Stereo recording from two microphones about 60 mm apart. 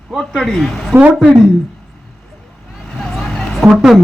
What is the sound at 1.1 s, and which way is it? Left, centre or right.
Speech, centre.